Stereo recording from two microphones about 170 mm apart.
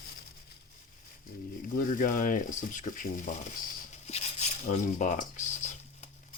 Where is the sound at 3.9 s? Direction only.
40° left (ahead or behind).